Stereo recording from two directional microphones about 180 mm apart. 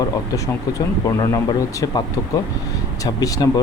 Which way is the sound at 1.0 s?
20° left (ahead or behind).